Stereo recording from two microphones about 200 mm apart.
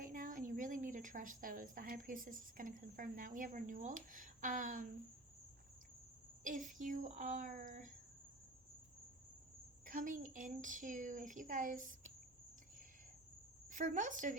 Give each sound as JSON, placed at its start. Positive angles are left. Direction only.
{"t": 0.0, "sound": "a woman's voice", "side_deg": -45}
{"t": 6.4, "sound": "a woman's voice", "side_deg": -40}
{"t": 9.8, "sound": "a woman's voice", "side_deg": -40}
{"t": 13.7, "sound": "a woman's voice", "side_deg": -40}